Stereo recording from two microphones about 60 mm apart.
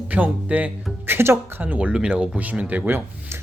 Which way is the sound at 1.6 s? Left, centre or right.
Right.